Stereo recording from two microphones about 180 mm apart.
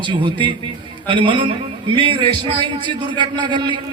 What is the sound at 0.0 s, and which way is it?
A man's voice, 25° right (ahead or behind).